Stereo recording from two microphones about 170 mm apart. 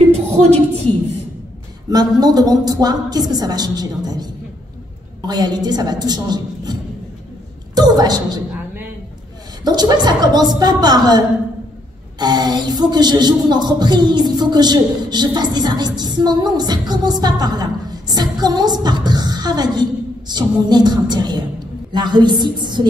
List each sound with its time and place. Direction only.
1.9 s speech: 25° right (ahead or behind)
9.7 s speech: 25° right (ahead or behind)